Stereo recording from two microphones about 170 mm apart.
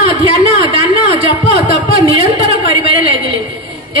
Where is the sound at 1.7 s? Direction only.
35° right (ahead or behind).